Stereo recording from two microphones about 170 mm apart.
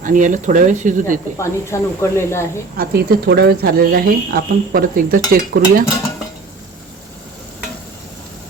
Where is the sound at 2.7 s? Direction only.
70° right (ahead or behind).